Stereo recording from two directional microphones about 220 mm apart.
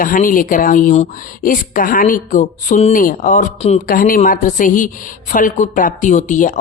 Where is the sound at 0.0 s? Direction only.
40° left (ahead or behind).